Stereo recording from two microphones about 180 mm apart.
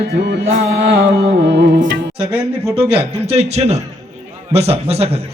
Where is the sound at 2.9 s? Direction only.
35° right (ahead or behind).